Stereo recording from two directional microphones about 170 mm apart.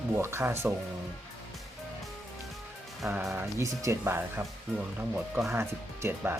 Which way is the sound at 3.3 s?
15° right (ahead or behind).